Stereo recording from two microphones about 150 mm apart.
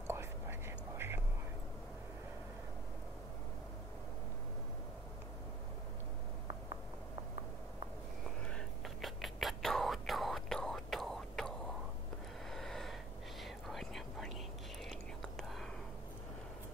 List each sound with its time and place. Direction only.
0.0 s whispering: 15° right (ahead or behind)
8.5 s whispering: centre (ahead or behind)
12.4 s gasp: 5° left (ahead or behind)
13.4 s whispering: centre (ahead or behind)